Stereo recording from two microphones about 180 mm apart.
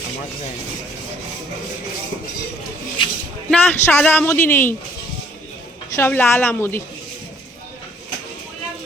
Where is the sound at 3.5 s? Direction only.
10° left (ahead or behind).